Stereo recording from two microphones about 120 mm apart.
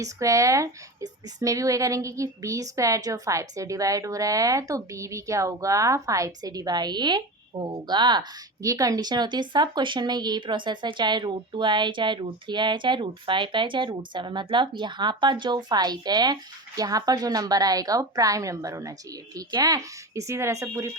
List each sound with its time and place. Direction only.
0.0 s speech: 25° right (ahead or behind)